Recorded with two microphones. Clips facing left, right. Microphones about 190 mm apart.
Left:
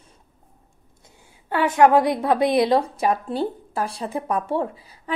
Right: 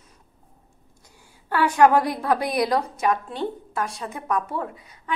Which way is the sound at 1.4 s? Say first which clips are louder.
Left 1 dB; 20° left (ahead or behind).